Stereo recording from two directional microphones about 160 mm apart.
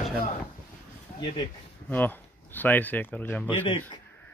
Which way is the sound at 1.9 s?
10° left (ahead or behind).